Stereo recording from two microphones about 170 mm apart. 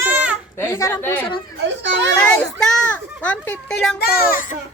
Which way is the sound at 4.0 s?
50° left (ahead or behind).